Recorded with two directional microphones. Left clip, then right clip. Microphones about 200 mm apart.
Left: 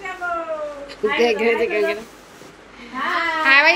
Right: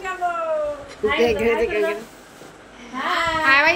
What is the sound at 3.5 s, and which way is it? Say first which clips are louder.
Babbling: left 3 dB; centre (ahead or behind).